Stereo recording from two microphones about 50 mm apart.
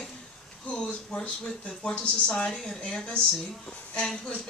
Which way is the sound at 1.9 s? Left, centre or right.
Left.